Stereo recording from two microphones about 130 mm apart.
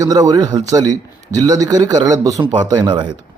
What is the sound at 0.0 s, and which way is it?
A man's voice, 30° right (ahead or behind).